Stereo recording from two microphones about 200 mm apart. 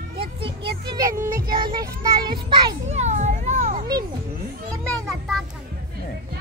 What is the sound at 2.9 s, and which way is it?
Children playing, 35° right (ahead or behind).